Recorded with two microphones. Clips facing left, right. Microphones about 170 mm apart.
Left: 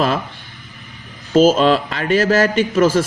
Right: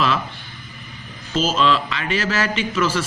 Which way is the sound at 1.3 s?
50° left (ahead or behind).